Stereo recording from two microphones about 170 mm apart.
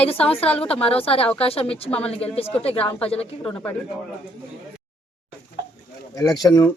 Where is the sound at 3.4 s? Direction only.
10° left (ahead or behind).